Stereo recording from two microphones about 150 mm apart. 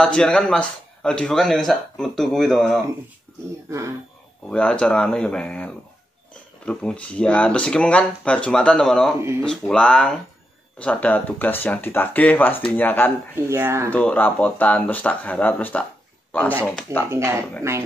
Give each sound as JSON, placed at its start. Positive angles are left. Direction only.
{"t": 0.0, "sound": "speech", "side_deg": 5}
{"t": 4.5, "sound": "speech", "side_deg": 5}
{"t": 13.5, "sound": "speech", "side_deg": -15}
{"t": 13.8, "sound": "speech", "side_deg": 10}
{"t": 16.3, "sound": "a sound", "side_deg": 10}
{"t": 17.1, "sound": "speech", "side_deg": -20}